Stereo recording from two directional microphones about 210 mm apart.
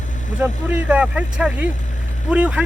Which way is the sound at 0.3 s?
5° right (ahead or behind).